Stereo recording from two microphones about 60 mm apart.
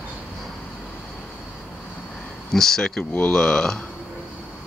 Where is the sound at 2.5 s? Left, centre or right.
Centre.